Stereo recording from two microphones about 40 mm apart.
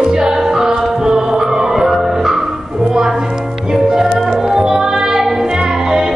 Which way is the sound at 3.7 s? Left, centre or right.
Centre.